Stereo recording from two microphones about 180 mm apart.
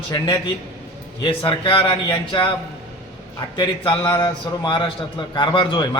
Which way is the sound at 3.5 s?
25° left (ahead or behind).